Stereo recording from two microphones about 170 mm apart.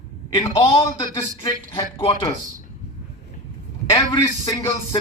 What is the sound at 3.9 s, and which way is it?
Speech, 25° left (ahead or behind).